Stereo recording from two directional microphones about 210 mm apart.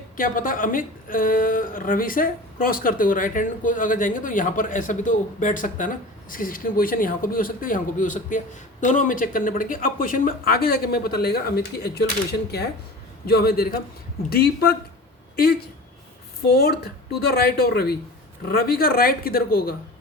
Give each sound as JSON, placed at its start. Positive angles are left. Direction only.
{"t": 0.2, "sound": "a woman's voice", "side_deg": 40}
{"t": 13.2, "sound": "speech", "side_deg": 45}
{"t": 16.6, "sound": "speech", "side_deg": 50}